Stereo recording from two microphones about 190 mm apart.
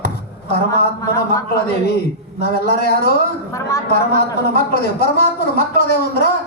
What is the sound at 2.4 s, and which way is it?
Speech, 55° left (ahead or behind).